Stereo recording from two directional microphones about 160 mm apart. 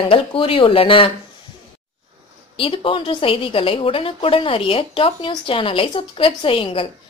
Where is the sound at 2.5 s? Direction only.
35° left (ahead or behind).